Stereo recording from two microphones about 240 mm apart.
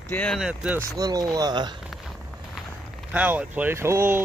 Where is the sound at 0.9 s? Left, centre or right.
Centre.